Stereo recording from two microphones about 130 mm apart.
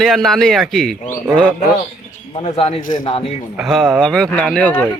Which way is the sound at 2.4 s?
55° left (ahead or behind).